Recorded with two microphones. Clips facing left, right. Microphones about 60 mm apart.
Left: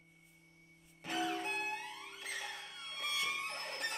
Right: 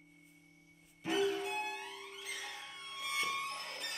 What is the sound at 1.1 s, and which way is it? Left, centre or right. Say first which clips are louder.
Music: right 3 dB; left.